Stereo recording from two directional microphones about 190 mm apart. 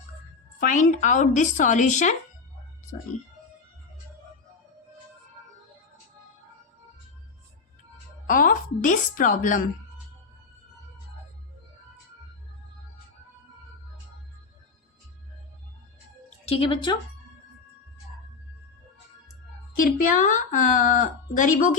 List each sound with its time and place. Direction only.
0.6 s speech: 40° left (ahead or behind)
8.3 s a woman's voice: 45° left (ahead or behind)
16.5 s speech: 30° left (ahead or behind)
19.7 s a woman's voice: 45° left (ahead or behind)